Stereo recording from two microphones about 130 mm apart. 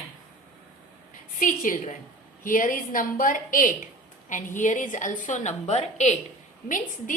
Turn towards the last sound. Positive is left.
turn(degrees=90)